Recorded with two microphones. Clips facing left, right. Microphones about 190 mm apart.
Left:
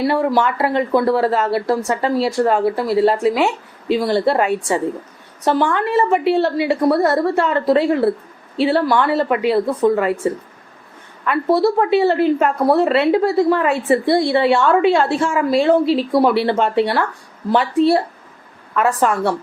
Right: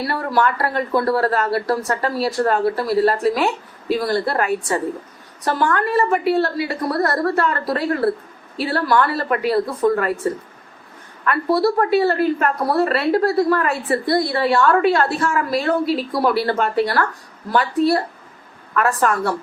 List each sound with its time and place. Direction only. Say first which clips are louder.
0.1 s speech: left 3 dB; 20° left (ahead or behind)
11.3 s speech: left 2 dB; 20° left (ahead or behind)
18.7 s a woman's voice: left 2 dB; 15° left (ahead or behind)